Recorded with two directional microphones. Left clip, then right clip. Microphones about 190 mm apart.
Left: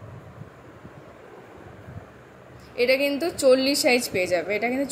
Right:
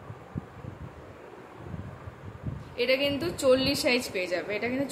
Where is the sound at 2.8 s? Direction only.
25° left (ahead or behind).